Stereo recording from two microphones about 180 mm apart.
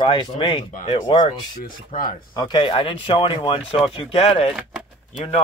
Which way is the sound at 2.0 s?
50° left (ahead or behind).